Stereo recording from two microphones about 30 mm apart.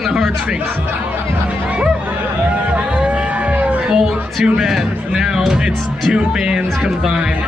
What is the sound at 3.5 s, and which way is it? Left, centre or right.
Music, right.